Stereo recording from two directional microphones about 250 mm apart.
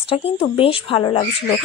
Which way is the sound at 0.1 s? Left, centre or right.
Left.